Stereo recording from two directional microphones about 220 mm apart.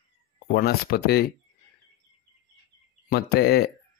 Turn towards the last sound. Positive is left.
turn(degrees=45)  # may be behind; listen again after turning